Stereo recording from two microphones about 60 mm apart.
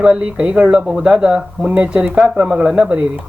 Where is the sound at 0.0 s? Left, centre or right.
Centre.